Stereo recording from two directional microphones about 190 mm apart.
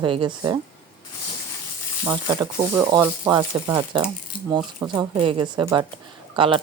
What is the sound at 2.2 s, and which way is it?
Speech, 20° right (ahead or behind).